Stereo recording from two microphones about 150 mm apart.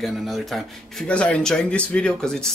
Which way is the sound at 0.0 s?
Centre (ahead or behind).